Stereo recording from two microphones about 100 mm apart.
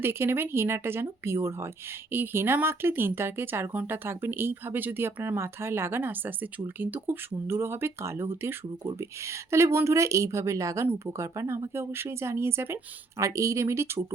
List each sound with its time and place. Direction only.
0.0 s a woman's voice: 25° right (ahead or behind)